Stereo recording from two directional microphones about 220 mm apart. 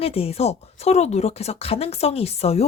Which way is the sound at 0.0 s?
25° left (ahead or behind).